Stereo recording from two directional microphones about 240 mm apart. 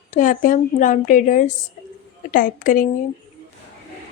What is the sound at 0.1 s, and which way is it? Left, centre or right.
Speech, left.